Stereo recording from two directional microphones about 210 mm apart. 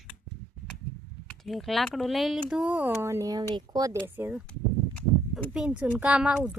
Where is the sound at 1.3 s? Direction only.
Centre (ahead or behind); by 3.9 s 20° right (ahead or behind).